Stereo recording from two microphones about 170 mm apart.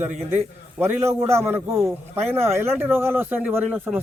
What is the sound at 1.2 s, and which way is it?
A man's voice, 15° right (ahead or behind).